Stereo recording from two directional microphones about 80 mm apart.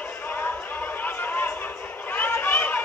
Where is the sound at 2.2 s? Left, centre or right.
Left.